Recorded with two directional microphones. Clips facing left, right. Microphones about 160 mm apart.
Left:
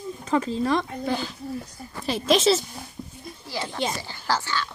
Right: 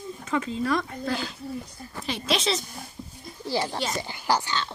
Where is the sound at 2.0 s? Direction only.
45° left (ahead or behind).